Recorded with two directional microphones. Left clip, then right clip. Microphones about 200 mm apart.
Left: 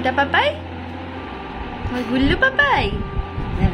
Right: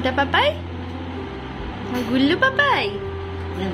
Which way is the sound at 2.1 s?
5° right (ahead or behind).